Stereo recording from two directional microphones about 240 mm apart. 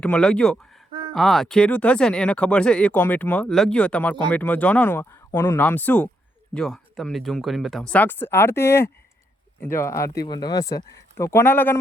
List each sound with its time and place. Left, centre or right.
0.0 s speech: centre